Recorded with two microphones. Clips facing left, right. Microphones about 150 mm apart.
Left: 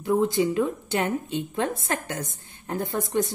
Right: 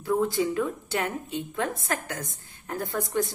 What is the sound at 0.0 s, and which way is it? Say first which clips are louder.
A woman's voice: left 3 dB; 20° left (ahead or behind).